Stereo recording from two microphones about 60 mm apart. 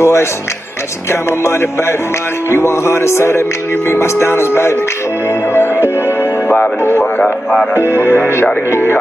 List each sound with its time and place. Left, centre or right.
0.0 s music: left
2.5 s music: left
7.7 s music: left